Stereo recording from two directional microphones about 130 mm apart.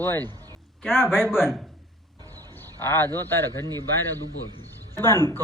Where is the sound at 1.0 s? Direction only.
5° right (ahead or behind).